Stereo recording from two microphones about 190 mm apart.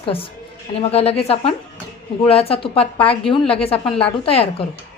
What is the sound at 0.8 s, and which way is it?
Speech, 30° left (ahead or behind).